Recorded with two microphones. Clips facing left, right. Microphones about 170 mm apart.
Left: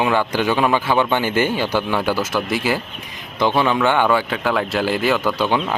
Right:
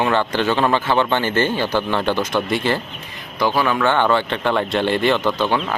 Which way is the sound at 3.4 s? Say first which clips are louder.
Left 1 dB; 20° left (ahead or behind).